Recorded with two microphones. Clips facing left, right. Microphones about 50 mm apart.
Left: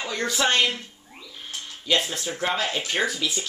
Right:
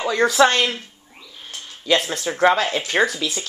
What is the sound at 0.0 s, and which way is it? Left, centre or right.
Speech, right.